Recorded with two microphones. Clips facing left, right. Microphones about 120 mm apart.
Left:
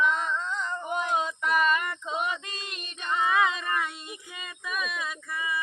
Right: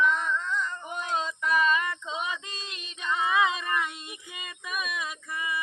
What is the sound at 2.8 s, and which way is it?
Female singing, 55° left (ahead or behind).